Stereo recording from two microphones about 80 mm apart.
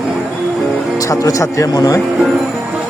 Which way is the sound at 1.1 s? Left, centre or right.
Left.